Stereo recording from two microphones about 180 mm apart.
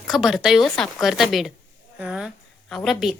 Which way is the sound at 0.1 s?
Centre (ahead or behind).